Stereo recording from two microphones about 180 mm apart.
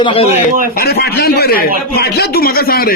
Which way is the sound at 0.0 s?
30° left (ahead or behind).